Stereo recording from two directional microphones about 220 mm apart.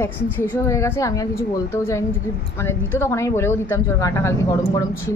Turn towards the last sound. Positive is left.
turn(degrees=10)  # may be behind; listen again after turning